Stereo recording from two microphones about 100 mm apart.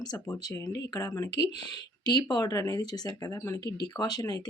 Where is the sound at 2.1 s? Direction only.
50° left (ahead or behind); by 3.6 s 30° left (ahead or behind).